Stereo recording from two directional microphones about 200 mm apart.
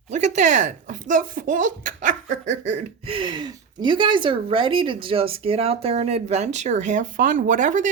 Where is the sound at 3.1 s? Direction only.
25° right (ahead or behind).